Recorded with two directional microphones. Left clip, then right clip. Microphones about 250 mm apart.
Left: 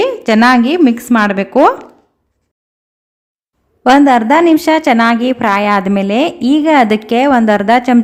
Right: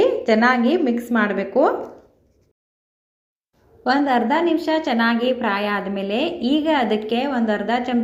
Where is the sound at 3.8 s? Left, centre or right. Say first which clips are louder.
Left 11 dB; left.